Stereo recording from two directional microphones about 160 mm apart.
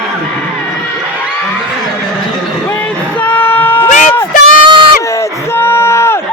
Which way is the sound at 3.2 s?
10° left (ahead or behind).